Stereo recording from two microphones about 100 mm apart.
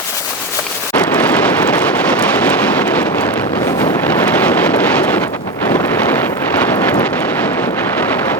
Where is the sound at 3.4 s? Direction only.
40° left (ahead or behind).